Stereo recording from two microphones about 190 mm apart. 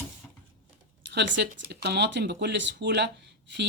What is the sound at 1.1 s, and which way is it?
Speech, 65° right (ahead or behind).